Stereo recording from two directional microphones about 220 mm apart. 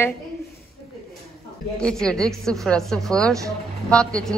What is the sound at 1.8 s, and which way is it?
A woman's voice, 5° left (ahead or behind).